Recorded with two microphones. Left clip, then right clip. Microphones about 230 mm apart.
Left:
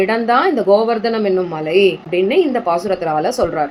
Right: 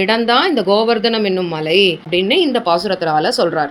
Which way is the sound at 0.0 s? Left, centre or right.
Right.